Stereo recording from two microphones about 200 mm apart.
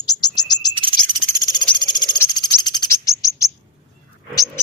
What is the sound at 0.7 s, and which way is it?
Cricket, 25° right (ahead or behind).